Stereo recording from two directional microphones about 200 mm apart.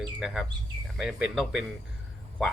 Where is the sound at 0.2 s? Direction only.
Centre (ahead or behind).